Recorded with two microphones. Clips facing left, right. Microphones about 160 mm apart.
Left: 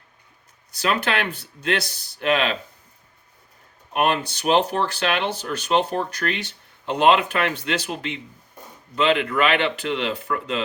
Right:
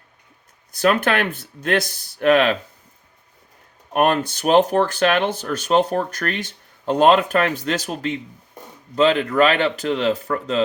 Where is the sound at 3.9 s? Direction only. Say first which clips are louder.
Right 4 dB; 50° right (ahead or behind).